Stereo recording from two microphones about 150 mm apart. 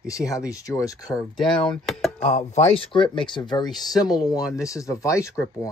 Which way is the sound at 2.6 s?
40° left (ahead or behind).